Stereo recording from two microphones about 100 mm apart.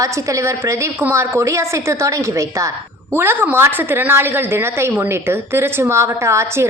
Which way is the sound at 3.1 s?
20° right (ahead or behind).